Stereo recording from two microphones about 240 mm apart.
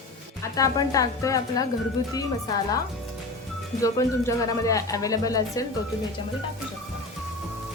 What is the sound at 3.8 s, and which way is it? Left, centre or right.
Speech, centre.